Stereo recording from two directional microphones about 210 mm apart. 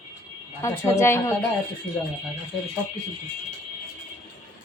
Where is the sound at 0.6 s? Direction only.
15° left (ahead or behind).